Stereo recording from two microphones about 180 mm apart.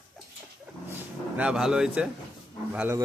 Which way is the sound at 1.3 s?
5° right (ahead or behind).